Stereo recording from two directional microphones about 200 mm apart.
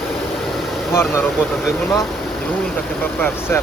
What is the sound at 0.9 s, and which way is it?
Speech, 15° left (ahead or behind).